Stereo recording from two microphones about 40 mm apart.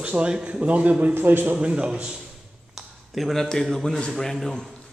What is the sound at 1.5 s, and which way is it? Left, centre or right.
Speech, right.